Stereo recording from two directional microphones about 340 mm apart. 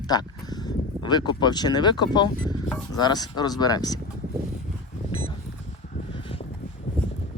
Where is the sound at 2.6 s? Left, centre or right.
Centre.